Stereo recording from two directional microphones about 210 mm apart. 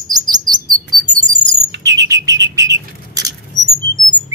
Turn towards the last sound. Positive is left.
turn(degrees=-15)  # may be behind; listen again after turning